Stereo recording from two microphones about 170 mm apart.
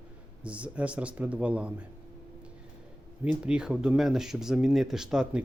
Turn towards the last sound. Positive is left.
turn(degrees=-5)  # may be behind; listen again after turning